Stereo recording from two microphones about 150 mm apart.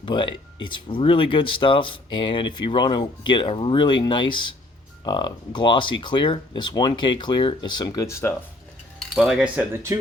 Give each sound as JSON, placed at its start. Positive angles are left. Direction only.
{"t": 0.0, "sound": "speech", "side_deg": 35}
{"t": 9.0, "sound": "cutlery", "side_deg": -5}
{"t": 9.9, "sound": "speech", "side_deg": -20}